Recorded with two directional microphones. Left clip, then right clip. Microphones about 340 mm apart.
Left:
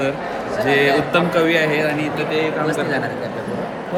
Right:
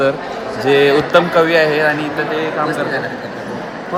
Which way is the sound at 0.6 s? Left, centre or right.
Centre.